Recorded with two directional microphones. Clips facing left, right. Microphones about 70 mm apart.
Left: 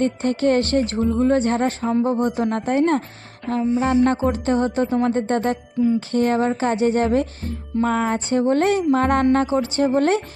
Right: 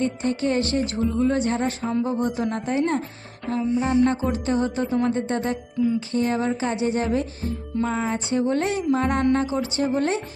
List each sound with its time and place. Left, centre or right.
0.0 s speech: left
4.0 s speech: left